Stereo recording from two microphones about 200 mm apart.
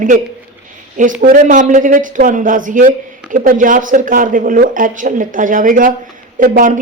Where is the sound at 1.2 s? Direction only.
40° right (ahead or behind).